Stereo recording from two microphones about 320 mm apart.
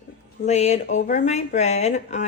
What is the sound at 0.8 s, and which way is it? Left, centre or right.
Speech, left.